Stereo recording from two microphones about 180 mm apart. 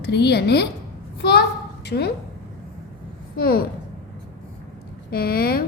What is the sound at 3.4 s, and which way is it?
Speech, 55° left (ahead or behind).